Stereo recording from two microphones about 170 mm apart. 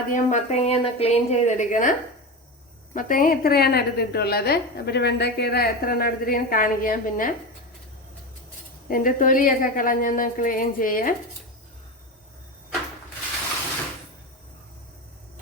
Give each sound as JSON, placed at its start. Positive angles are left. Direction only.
{"t": 0.1, "sound": "a woman's voice", "side_deg": 45}
{"t": 8.9, "sound": "a woman's voice", "side_deg": 55}